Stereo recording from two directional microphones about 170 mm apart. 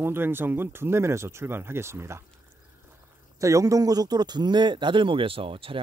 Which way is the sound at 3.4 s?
20° right (ahead or behind).